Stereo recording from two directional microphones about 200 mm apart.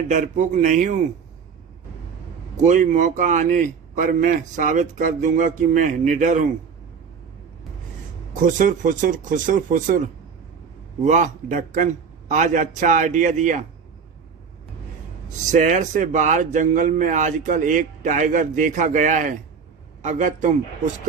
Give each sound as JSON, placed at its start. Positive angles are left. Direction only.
{"t": 0.1, "sound": "a man's voice", "side_deg": -40}
{"t": 2.6, "sound": "a man's voice", "side_deg": -40}
{"t": 8.4, "sound": "a man's voice", "side_deg": -40}
{"t": 11.0, "sound": "a man's voice", "side_deg": -40}
{"t": 15.3, "sound": "a man's voice", "side_deg": -35}